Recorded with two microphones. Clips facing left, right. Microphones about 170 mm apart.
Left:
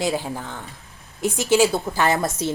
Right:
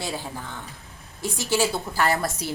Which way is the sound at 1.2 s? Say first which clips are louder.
Left 6 dB; 20° left (ahead or behind).